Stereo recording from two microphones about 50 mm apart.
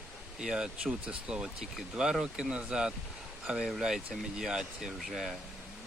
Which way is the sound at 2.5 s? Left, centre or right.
Centre.